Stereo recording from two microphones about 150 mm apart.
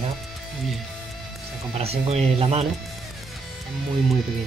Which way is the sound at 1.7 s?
40° right (ahead or behind).